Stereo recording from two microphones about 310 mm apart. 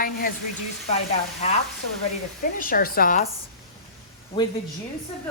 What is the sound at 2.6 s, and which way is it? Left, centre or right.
Speech, left.